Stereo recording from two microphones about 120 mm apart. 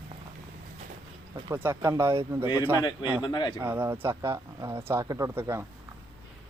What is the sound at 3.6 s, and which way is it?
Speech, 15° right (ahead or behind).